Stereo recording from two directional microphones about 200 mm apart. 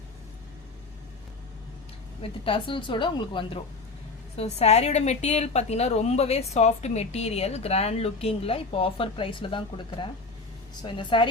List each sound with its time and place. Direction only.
2.2 s a woman's voice: 25° left (ahead or behind)